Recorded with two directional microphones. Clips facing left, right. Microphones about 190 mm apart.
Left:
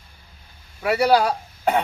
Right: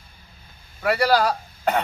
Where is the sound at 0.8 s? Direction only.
5° left (ahead or behind).